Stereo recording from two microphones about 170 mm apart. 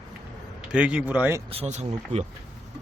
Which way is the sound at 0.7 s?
5° right (ahead or behind).